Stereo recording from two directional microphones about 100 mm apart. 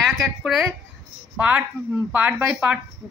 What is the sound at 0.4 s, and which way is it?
A woman's voice, 5° right (ahead or behind).